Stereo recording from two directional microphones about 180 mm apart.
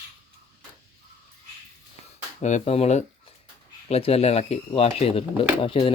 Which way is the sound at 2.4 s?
40° left (ahead or behind).